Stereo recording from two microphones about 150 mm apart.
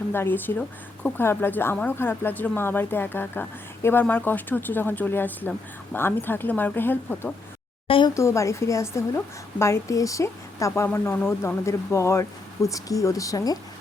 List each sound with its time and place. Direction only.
0.1 s speech: 15° left (ahead or behind)
7.9 s speech: 35° left (ahead or behind)
8.1 s a woman's voice: 20° left (ahead or behind)